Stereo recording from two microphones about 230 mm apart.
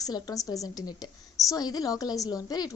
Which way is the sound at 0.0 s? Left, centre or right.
Centre.